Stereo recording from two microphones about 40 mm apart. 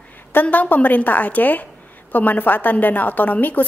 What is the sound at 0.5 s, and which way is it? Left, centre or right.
A woman's voice, left.